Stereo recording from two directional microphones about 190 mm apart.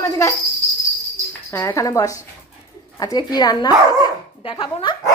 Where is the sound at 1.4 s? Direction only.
15° left (ahead or behind).